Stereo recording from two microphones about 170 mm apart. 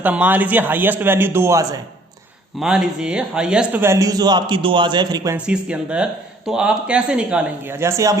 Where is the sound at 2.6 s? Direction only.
5° right (ahead or behind); by 5.4 s 20° right (ahead or behind).